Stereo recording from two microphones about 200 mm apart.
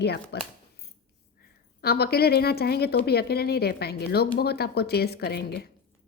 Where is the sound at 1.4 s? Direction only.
50° left (ahead or behind).